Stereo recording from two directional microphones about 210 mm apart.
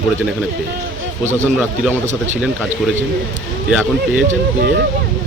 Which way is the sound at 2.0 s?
35° right (ahead or behind).